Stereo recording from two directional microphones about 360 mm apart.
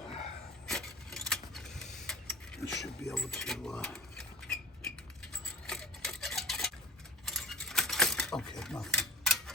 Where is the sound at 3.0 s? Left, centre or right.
Centre.